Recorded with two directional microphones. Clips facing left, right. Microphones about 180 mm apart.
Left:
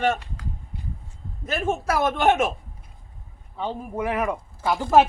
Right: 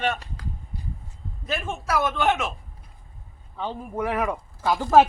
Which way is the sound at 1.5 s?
45° left (ahead or behind).